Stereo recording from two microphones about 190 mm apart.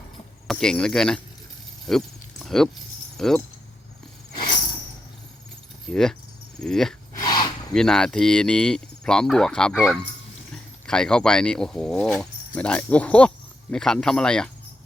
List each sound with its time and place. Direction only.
0.4 s speech: 5° left (ahead or behind)
1.9 s a sound: centre (ahead or behind)
3.2 s speech: centre (ahead or behind)
5.9 s speech: centre (ahead or behind)
7.1 s a sound: 20° left (ahead or behind)
7.7 s speech: 5° left (ahead or behind)